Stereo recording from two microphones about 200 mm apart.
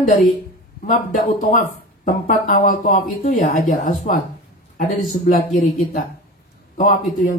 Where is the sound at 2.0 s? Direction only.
40° left (ahead or behind).